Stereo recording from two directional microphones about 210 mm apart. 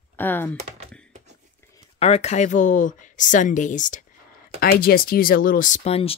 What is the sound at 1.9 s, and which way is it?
A woman's voice, 30° left (ahead or behind).